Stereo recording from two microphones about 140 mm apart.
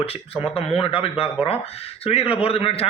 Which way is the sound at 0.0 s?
45° left (ahead or behind).